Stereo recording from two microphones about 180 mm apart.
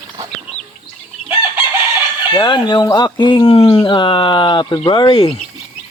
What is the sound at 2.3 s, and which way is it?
Speech, 25° left (ahead or behind).